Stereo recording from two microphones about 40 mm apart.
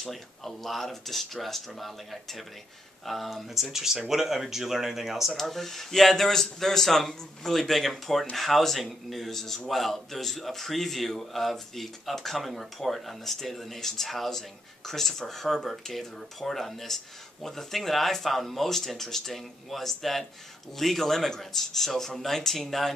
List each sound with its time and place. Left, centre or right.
0.1 s a man's voice: centre
3.1 s a man's voice: centre
3.7 s a man's voice: centre
5.3 s a man's voice: centre